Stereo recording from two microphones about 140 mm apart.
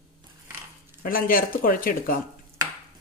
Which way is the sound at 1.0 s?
90° left.